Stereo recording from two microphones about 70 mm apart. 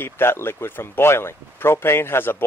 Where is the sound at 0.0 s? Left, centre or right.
Left.